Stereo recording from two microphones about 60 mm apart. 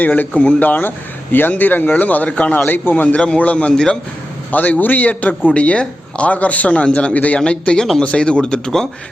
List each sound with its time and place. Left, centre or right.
0.0 s a man's voice: left
2.6 s a man's voice: left; by 3.9 s centre
4.5 s a man's voice: left; by 8.9 s centre